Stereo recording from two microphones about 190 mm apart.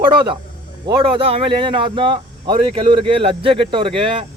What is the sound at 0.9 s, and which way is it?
Speech, 30° right (ahead or behind).